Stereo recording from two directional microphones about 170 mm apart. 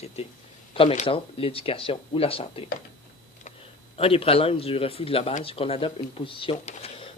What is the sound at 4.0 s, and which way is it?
Speech, 35° left (ahead or behind).